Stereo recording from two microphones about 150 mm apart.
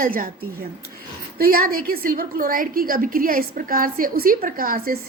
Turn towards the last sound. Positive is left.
turn(degrees=-75)  # may be behind; listen again after turning